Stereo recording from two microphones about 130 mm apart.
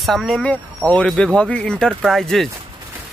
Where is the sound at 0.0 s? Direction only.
Centre (ahead or behind).